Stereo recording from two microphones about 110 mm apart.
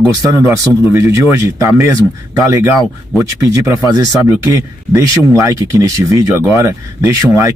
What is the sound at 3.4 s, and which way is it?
Speech, 25° right (ahead or behind).